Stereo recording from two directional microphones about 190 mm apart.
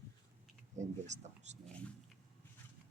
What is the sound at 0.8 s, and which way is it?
Speech, 40° right (ahead or behind).